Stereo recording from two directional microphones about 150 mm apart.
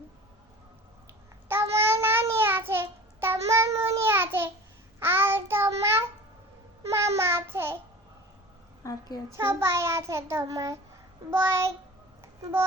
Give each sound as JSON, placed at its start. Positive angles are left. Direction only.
{"t": 1.5, "sound": "child singing", "side_deg": -15}
{"t": 7.2, "sound": "child singing", "side_deg": -15}
{"t": 8.8, "sound": "a sound", "side_deg": 25}
{"t": 9.3, "sound": "child singing", "side_deg": -15}
{"t": 12.4, "sound": "speech", "side_deg": -15}